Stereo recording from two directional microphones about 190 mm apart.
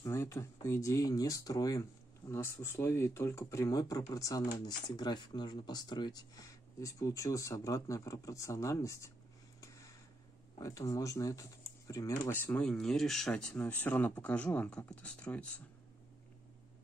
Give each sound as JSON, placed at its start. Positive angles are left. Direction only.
{"t": 0.0, "sound": "speech", "side_deg": 15}
{"t": 9.6, "sound": "a sound", "side_deg": 15}
{"t": 10.6, "sound": "speech", "side_deg": 15}